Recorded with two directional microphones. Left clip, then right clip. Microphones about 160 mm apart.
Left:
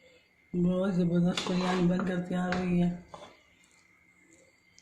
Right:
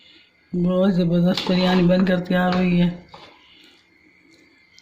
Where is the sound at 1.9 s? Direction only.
55° right (ahead or behind).